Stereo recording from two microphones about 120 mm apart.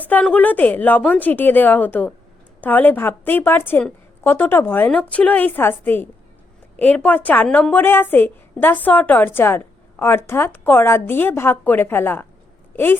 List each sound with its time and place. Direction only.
0.0 s a woman's voice: 15° left (ahead or behind)